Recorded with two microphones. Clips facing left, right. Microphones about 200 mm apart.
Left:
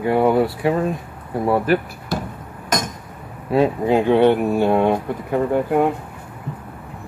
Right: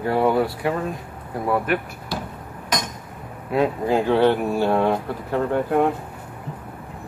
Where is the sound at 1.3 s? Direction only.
30° left (ahead or behind).